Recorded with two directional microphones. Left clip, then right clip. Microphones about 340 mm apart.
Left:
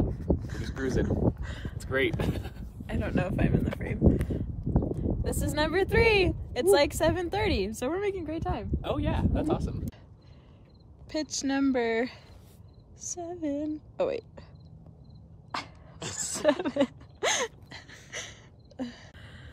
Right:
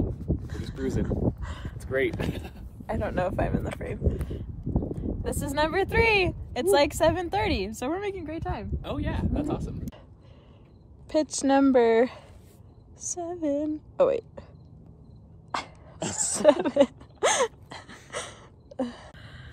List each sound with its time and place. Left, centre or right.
0.5 s a sound: centre
2.2 s speech: centre
11.1 s speech: centre
15.5 s wail: centre